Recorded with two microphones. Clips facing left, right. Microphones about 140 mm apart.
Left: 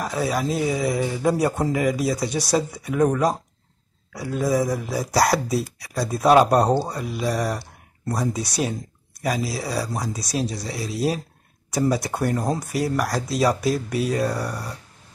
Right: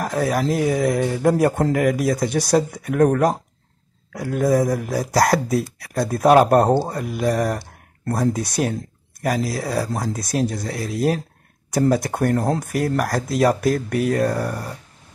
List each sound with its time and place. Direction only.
0.0 s speech: 55° right (ahead or behind)